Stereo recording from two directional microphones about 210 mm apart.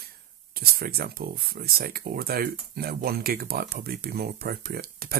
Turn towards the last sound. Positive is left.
turn(degrees=-45)  # may be behind; listen again after turning